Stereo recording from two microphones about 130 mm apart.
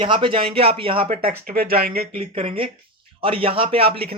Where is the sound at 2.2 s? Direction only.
45° right (ahead or behind).